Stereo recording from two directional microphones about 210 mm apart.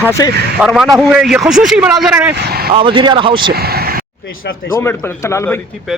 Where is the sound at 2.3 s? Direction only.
45° right (ahead or behind).